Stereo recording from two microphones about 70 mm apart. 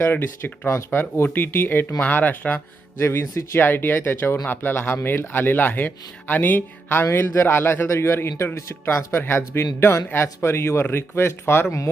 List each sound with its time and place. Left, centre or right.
0.0 s speech: left
3.0 s speech: left